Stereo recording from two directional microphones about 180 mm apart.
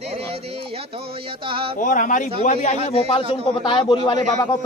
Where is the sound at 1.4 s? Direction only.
30° right (ahead or behind).